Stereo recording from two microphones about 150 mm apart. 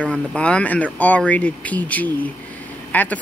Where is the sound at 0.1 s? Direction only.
5° left (ahead or behind).